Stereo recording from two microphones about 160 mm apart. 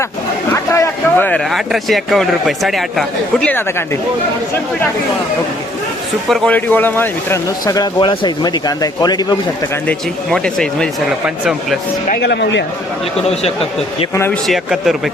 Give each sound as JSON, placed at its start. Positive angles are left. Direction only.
{"t": 0.5, "sound": "a sound", "side_deg": 15}
{"t": 1.5, "sound": "speech", "side_deg": 0}
{"t": 6.2, "sound": "speech", "side_deg": 0}
{"t": 7.6, "sound": "speech", "side_deg": 25}
{"t": 9.8, "sound": "speech", "side_deg": 5}
{"t": 12.0, "sound": "speech", "side_deg": 75}
{"t": 13.2, "sound": "speech", "side_deg": 40}
{"t": 14.4, "sound": "speech", "side_deg": 0}